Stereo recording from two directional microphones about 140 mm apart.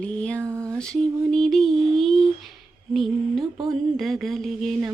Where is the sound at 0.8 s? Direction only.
5° left (ahead or behind).